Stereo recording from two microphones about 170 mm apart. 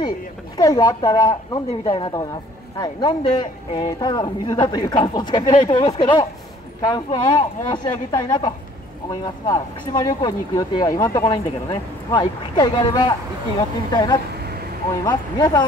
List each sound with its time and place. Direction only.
0.6 s a woman's voice: 20° left (ahead or behind)